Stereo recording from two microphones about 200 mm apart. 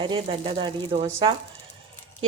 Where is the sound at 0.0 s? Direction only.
25° right (ahead or behind).